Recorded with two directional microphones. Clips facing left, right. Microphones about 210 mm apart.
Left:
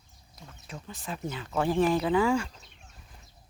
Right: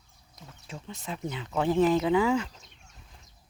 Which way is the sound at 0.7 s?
25° right (ahead or behind).